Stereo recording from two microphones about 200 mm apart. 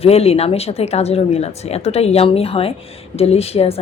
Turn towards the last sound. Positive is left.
turn(degrees=30)  # may be behind; listen again after turning